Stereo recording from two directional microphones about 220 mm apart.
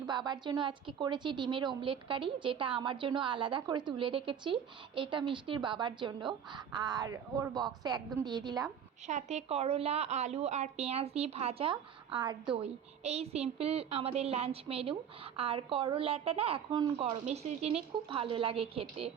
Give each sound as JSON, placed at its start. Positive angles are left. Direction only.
{"t": 0.1, "sound": "a woman's voice", "side_deg": -20}
{"t": 9.0, "sound": "a woman's voice", "side_deg": -30}